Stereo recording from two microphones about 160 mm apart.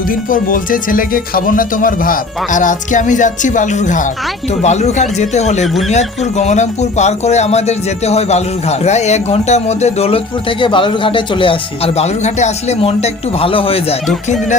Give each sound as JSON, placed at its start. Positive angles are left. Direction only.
{"t": 0.1, "sound": "speech", "side_deg": 60}
{"t": 10.6, "sound": "speech", "side_deg": 30}